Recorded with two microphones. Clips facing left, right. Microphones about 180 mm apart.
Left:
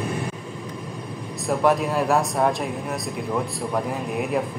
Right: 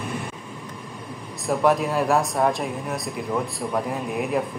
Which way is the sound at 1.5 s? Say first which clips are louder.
Even; centre (ahead or behind).